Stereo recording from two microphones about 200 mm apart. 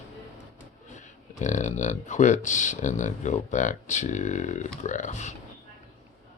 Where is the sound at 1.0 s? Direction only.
35° left (ahead or behind).